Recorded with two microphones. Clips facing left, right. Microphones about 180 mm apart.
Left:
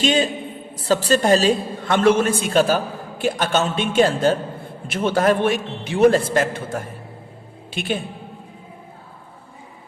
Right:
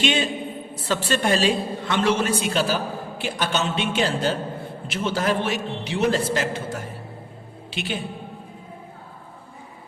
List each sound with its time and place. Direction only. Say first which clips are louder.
0.0 s a man's voice: left 4 dB; 40° left (ahead or behind)